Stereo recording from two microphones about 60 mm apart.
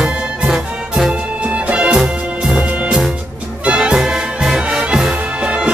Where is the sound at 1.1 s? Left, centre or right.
Right.